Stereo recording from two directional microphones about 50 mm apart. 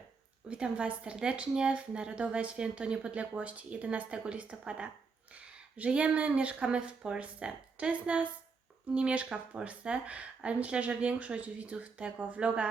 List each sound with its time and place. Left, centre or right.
0.4 s a woman's voice: centre